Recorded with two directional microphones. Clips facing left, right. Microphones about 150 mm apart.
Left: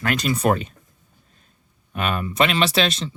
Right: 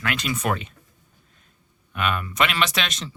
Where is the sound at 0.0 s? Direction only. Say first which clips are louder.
Left 5 dB; 40° left (ahead or behind).